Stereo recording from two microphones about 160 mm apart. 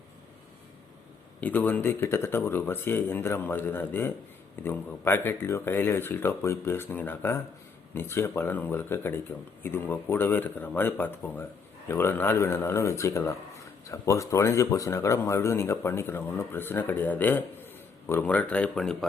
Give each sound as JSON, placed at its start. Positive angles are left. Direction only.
{"t": 1.4, "sound": "speech", "side_deg": 10}